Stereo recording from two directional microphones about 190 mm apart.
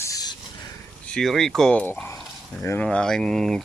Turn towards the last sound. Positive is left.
turn(degrees=0)  # may be behind; listen again after turning